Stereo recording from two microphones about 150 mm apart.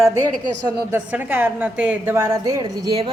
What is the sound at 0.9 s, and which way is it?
A woman's voice, 10° right (ahead or behind).